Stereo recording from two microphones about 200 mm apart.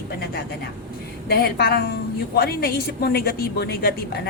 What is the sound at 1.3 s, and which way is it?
A woman's voice, 50° left (ahead or behind).